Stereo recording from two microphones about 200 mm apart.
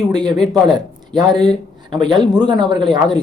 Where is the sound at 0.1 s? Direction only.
20° right (ahead or behind).